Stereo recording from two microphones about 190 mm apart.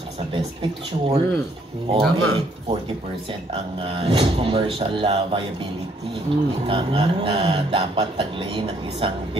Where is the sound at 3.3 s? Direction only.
30° right (ahead or behind).